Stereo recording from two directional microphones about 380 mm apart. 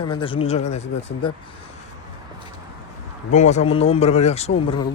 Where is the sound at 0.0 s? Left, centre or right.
Centre.